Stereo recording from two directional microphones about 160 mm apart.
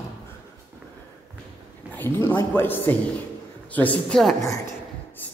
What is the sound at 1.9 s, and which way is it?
A man's voice, 10° left (ahead or behind).